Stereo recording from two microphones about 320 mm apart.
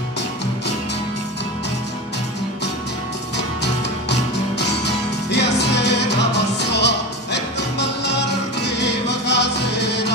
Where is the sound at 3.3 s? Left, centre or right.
Left.